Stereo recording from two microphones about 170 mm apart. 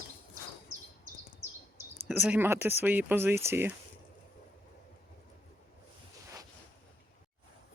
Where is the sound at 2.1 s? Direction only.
10° right (ahead or behind).